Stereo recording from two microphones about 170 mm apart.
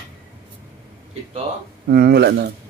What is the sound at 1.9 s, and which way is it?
Speech, 70° right (ahead or behind).